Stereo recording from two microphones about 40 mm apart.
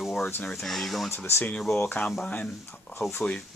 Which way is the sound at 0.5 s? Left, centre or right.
Centre.